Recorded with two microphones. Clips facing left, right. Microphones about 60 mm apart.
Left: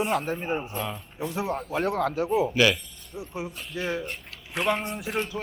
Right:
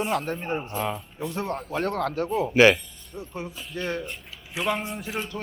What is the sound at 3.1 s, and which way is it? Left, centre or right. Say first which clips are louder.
Speech: left 1 dB; centre.